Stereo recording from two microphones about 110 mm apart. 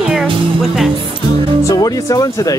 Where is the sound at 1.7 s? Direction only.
35° left (ahead or behind).